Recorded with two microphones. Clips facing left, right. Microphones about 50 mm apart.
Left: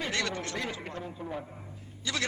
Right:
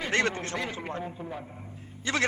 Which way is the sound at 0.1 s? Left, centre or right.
Right.